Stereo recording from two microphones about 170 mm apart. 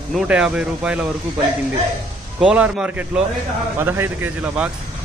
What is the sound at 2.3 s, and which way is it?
Speech, 5° right (ahead or behind).